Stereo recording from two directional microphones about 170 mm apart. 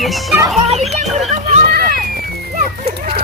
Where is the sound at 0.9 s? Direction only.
40° right (ahead or behind).